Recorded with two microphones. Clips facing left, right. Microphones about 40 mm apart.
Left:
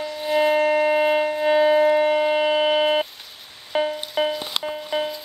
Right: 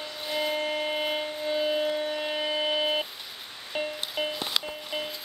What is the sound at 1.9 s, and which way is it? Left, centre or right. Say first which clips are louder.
Civil defense siren: left 11 dB; left.